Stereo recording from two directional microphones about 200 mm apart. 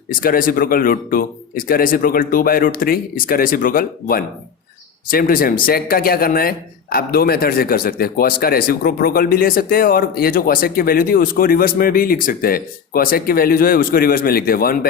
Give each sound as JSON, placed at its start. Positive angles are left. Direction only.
{"t": 0.1, "sound": "speech", "side_deg": 45}